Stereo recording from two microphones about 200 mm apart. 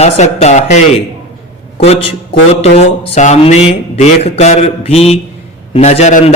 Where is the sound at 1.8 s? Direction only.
30° left (ahead or behind).